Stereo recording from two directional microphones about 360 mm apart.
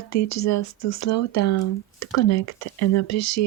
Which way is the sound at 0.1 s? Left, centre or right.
Left.